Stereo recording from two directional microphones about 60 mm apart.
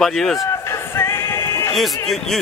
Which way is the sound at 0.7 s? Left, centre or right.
Left.